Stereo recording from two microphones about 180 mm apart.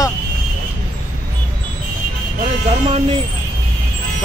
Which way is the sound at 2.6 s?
35° right (ahead or behind).